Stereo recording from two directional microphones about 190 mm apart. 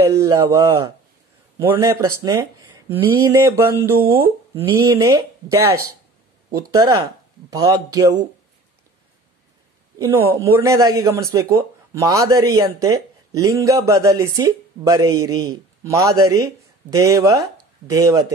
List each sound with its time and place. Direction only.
0.1 s a man's voice: 15° right (ahead or behind)
7.5 s speech: 20° right (ahead or behind)
9.9 s a man's voice: 15° right (ahead or behind)